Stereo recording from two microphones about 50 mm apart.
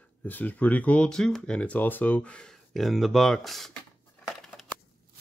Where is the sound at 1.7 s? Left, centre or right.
Left.